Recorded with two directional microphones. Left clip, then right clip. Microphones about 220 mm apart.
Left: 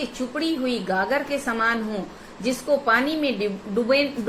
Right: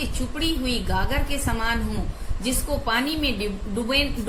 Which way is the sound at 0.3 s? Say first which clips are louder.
Left 1 dB; 20° right (ahead or behind).